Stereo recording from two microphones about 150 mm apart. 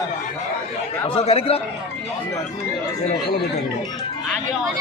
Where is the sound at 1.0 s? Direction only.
40° left (ahead or behind).